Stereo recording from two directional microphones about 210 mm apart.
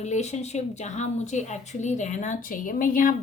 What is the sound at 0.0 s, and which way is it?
A woman's voice, 35° left (ahead or behind).